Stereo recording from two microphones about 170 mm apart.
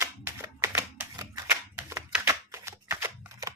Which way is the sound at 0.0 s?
15° right (ahead or behind).